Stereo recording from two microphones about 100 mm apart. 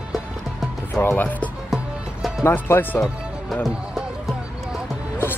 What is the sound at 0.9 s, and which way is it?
Speech, 20° left (ahead or behind).